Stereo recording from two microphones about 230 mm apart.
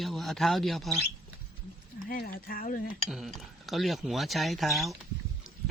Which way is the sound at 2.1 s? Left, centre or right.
Left.